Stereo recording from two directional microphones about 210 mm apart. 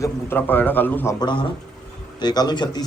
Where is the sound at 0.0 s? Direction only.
10° left (ahead or behind).